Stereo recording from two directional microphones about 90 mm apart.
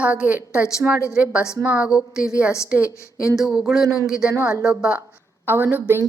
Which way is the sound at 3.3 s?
5° right (ahead or behind).